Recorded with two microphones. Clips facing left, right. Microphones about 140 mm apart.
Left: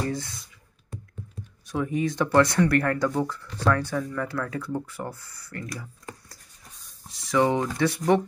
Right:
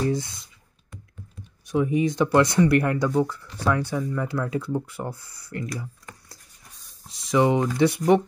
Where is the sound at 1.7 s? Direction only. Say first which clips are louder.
Right 4 dB; 15° right (ahead or behind).